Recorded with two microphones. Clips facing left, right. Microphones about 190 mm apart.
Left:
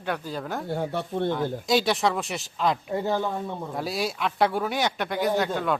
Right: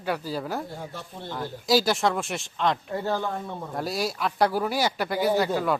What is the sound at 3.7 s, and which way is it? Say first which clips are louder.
Speech: right 1 dB; centre (ahead or behind).